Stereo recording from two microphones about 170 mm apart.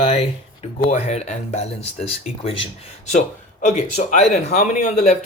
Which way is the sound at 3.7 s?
45° left (ahead or behind).